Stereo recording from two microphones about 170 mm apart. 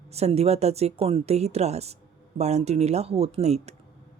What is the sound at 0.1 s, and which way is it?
Speech, 40° right (ahead or behind).